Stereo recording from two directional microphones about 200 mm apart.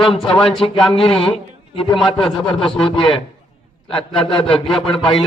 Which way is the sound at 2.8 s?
25° left (ahead or behind).